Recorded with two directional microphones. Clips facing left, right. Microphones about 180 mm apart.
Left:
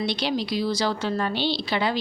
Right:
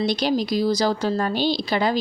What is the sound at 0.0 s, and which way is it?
A woman's voice, 40° right (ahead or behind).